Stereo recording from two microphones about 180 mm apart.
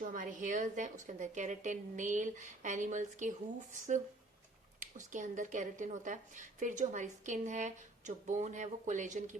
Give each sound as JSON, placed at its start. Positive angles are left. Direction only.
{"t": 0.0, "sound": "a woman's voice", "side_deg": -45}